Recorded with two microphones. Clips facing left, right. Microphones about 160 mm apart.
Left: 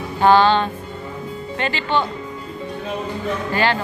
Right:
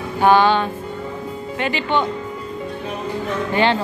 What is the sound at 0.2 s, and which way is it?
Speech, 15° right (ahead or behind).